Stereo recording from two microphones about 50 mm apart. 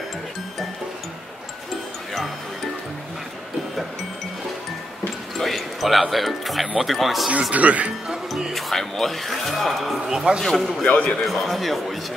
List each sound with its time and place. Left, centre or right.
5.4 s speech: centre
7.5 s speech: right
8.5 s speech: centre
10.0 s speech: centre
10.4 s speech: centre
10.9 s a man's voice: left
11.2 s speech: centre